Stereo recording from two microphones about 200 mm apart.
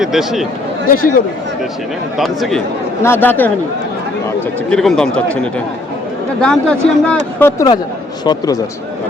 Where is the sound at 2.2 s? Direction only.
Centre (ahead or behind).